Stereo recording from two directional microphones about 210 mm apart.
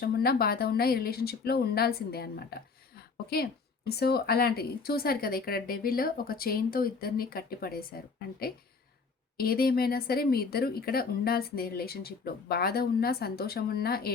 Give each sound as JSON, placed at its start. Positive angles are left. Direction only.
{"t": 0.0, "sound": "a woman's voice", "side_deg": 45}